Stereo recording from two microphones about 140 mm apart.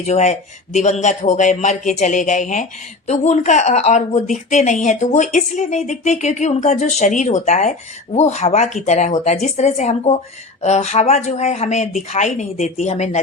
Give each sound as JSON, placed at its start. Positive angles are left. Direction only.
{"t": 0.1, "sound": "speech", "side_deg": 55}